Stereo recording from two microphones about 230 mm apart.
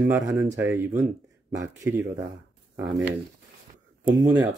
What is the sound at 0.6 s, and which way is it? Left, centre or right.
Speech, centre.